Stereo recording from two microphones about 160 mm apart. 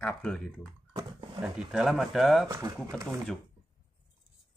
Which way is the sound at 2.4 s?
20° right (ahead or behind).